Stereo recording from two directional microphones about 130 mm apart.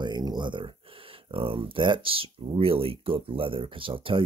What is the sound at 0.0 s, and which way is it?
Speech, 35° right (ahead or behind).